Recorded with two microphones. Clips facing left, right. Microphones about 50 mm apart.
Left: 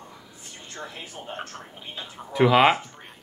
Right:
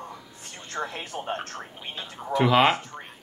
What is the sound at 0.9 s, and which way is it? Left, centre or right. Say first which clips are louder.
Speech: right 5 dB; right.